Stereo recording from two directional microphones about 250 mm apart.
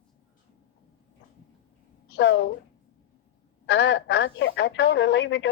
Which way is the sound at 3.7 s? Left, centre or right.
Left.